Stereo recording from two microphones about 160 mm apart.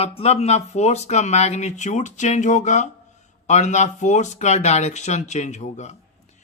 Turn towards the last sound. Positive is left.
turn(degrees=45)  # may be behind; listen again after turning